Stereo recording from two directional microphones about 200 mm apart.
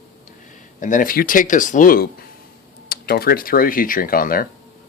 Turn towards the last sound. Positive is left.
turn(degrees=45)  # may be behind; listen again after turning